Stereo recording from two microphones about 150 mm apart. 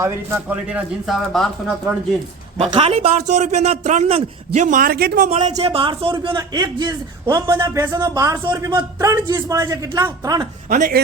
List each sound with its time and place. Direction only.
0.0 s speech: 15° right (ahead or behind); by 1.7 s centre (ahead or behind)
2.6 s a man's voice: 45° right (ahead or behind); by 5.2 s 90° right
5.2 s a man's voice: 50° right (ahead or behind); by 10.4 s 25° right (ahead or behind)
10.7 s speech: 70° right (ahead or behind)